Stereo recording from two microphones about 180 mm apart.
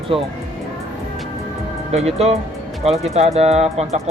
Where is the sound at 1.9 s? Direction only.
35° right (ahead or behind).